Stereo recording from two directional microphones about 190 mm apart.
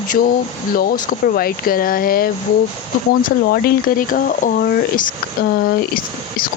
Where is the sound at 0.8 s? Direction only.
50° left (ahead or behind).